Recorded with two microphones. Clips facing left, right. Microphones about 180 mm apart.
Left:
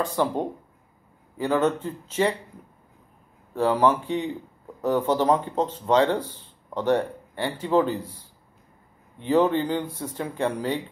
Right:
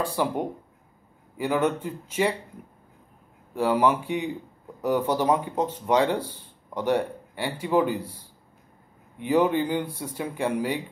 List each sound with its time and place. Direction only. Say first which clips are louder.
0.0 s speech: left 2 dB; 10° right (ahead or behind)
1.4 s speech: left 2 dB; 10° right (ahead or behind)
3.5 s speech: left 1 dB; 10° right (ahead or behind)
9.2 s speech: left 1 dB; 10° right (ahead or behind)